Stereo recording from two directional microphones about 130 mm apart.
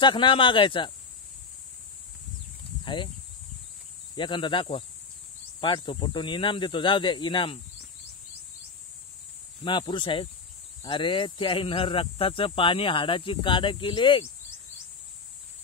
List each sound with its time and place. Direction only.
0.0 s speech: 40° left (ahead or behind)
2.8 s speech: 40° left (ahead or behind)
4.1 s speech: 40° left (ahead or behind)
9.7 s speech: 40° left (ahead or behind)